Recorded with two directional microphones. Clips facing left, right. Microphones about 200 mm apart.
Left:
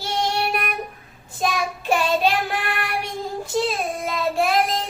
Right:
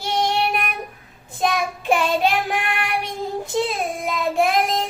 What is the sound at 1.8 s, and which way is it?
Child singing, 20° right (ahead or behind).